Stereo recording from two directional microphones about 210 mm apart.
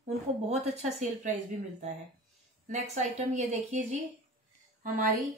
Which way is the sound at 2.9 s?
35° right (ahead or behind).